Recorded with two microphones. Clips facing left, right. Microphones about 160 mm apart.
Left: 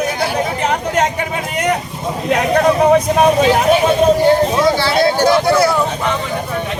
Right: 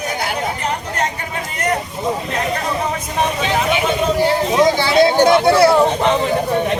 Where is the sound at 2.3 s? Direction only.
70° left (ahead or behind); by 3.7 s 55° left (ahead or behind).